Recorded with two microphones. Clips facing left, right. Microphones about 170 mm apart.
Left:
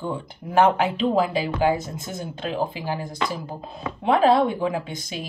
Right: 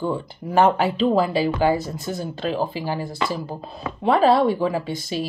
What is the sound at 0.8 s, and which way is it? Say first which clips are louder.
Speech: right 2 dB; 20° left (ahead or behind).